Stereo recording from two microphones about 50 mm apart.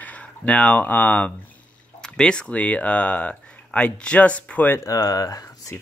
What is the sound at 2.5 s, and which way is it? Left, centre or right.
Speech, left.